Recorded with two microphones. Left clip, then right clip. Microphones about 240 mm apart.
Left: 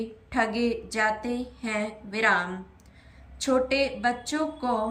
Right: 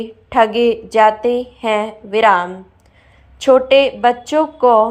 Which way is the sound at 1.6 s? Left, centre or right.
Centre.